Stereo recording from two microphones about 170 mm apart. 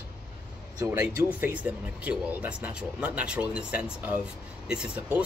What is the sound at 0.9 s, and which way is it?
Speech, 15° right (ahead or behind).